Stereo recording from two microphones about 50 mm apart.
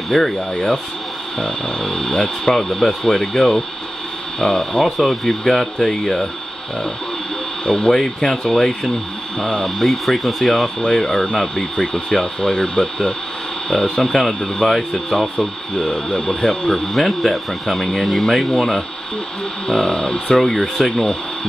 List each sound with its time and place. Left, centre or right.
0.1 s speech: centre
7.6 s speech: centre
9.8 s speech: centre
15.3 s speech: centre
20.3 s speech: centre